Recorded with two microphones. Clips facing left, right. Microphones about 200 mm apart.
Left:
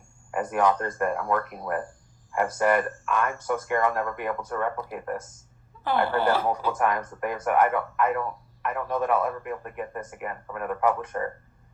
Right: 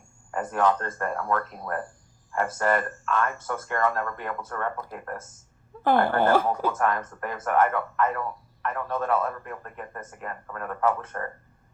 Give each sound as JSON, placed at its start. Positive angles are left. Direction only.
{"t": 0.3, "sound": "speech", "side_deg": 15}
{"t": 5.8, "sound": "speech", "side_deg": -50}
{"t": 6.7, "sound": "speech", "side_deg": 15}